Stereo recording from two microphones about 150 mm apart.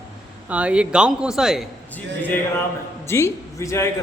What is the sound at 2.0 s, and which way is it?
Speech, 10° left (ahead or behind).